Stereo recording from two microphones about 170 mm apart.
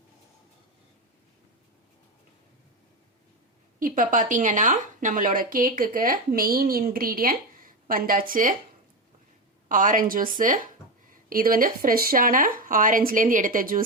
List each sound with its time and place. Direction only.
3.8 s a woman's voice: 50° right (ahead or behind)
9.6 s a woman's voice: 50° right (ahead or behind)